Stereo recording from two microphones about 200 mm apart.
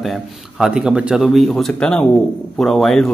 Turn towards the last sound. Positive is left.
turn(degrees=0)  # may be behind; listen again after turning